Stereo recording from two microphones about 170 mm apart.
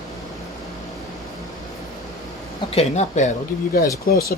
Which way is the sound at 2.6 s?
40° left (ahead or behind).